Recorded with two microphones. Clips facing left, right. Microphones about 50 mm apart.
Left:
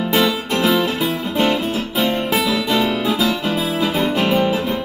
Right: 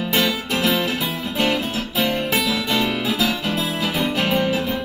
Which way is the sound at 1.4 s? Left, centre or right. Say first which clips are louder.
Left 3 dB; left.